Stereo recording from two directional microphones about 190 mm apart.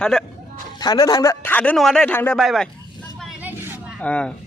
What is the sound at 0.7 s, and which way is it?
A man's voice, 20° left (ahead or behind).